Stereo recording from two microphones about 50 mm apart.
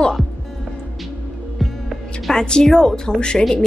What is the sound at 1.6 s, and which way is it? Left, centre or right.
Music, centre.